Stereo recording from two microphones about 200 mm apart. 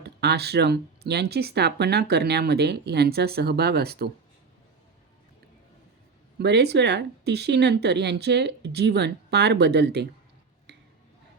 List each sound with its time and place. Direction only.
0.0 s speech: 55° right (ahead or behind)
6.4 s speech: 55° right (ahead or behind)